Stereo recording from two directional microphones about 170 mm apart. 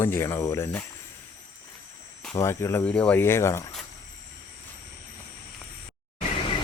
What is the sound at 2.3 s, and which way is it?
Speech, 15° left (ahead or behind).